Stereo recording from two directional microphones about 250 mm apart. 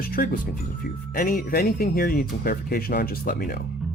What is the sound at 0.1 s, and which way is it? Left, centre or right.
Speech, left.